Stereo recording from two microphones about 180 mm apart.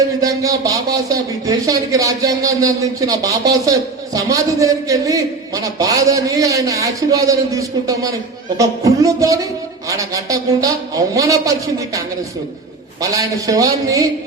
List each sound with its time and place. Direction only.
0.2 s a man's voice: 20° right (ahead or behind)
13.0 s speech: 20° right (ahead or behind)